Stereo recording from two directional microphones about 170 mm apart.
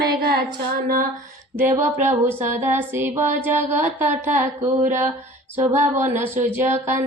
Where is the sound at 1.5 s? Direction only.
15° right (ahead or behind).